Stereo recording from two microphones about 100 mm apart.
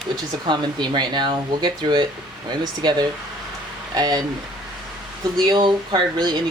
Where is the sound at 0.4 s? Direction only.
45° right (ahead or behind).